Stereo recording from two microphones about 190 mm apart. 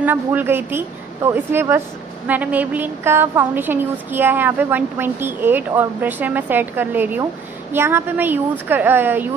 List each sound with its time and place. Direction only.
0.0 s a woman's voice: 10° right (ahead or behind)